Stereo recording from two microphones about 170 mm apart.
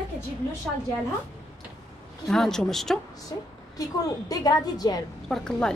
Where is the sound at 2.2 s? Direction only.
Centre (ahead or behind).